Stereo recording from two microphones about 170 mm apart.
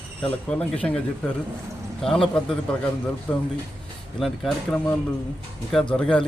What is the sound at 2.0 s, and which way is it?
Speech, centre (ahead or behind).